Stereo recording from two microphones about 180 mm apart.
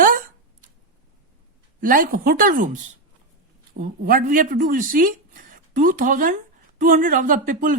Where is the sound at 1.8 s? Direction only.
50° right (ahead or behind).